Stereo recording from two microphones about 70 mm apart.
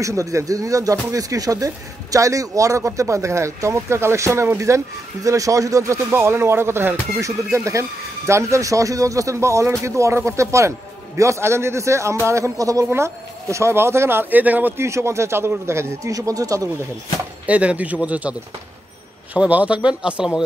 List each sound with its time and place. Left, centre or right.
0.0 s speech: right
6.1 s speech: right
7.2 s speech: right
12.9 s speech: right
14.4 s speech: right
14.8 s speech: right
16.1 s speech: right
17.5 s speech: centre
19.3 s speech: centre